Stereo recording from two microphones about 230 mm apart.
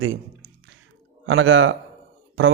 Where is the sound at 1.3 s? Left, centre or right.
Right.